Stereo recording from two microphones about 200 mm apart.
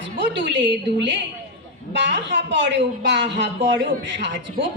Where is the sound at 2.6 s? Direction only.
65° right (ahead or behind).